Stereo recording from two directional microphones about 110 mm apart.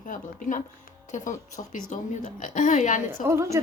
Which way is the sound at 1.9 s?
90° left.